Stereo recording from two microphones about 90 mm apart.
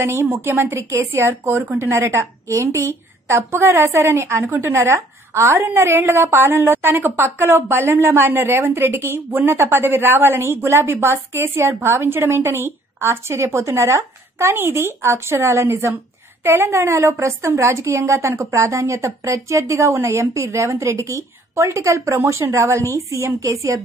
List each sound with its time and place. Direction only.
0.0 s a woman's voice: 30° right (ahead or behind)